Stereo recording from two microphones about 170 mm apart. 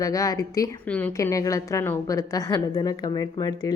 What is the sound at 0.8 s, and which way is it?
Speech, 10° left (ahead or behind).